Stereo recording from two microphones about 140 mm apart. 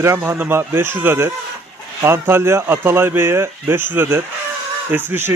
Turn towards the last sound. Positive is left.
turn(degrees=-15)  # may be behind; listen again after turning